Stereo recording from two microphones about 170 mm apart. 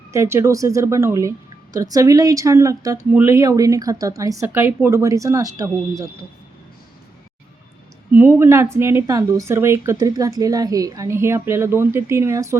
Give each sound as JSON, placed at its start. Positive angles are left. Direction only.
{"t": 0.1, "sound": "a woman's voice", "side_deg": -15}
{"t": 8.1, "sound": "a woman's voice", "side_deg": -15}